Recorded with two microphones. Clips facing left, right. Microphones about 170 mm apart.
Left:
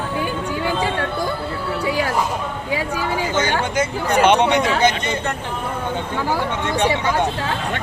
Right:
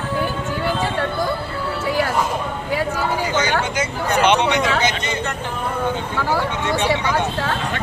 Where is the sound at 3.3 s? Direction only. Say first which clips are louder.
Left 1 dB; 50° left (ahead or behind).